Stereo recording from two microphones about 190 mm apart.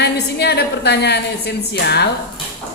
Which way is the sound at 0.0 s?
60° left (ahead or behind).